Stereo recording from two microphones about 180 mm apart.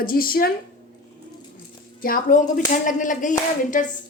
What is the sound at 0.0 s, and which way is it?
Speech, 55° left (ahead or behind).